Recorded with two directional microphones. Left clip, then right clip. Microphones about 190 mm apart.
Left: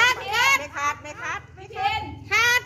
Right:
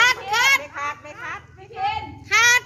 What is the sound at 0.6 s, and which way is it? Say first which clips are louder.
Quack: left 2 dB; 55° left (ahead or behind).